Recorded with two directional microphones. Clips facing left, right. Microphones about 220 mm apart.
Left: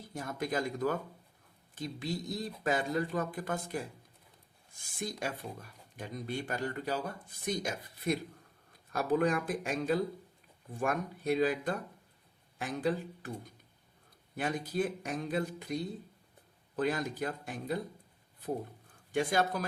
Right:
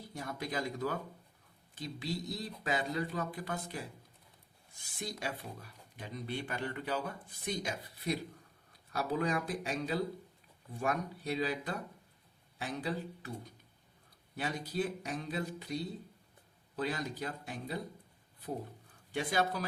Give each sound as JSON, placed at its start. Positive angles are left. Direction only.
{"t": 0.1, "sound": "speech", "side_deg": 45}
{"t": 14.3, "sound": "speech", "side_deg": 50}
{"t": 19.1, "sound": "speech", "side_deg": 50}